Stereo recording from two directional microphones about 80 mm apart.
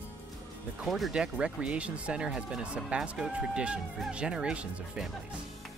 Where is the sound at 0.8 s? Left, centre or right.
Centre.